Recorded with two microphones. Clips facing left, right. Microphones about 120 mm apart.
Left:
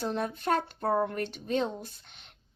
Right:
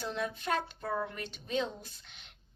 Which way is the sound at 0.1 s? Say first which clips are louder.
Left 3 dB; 45° left (ahead or behind).